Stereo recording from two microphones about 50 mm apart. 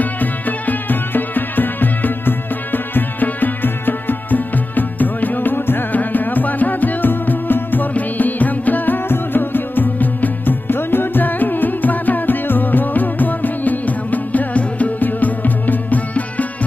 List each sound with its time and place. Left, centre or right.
0.0 s music: left